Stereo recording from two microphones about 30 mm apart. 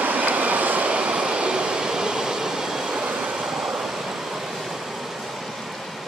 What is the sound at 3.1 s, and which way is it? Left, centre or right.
Vehicle, right.